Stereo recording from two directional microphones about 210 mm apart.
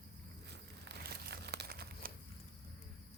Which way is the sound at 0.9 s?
50° right (ahead or behind).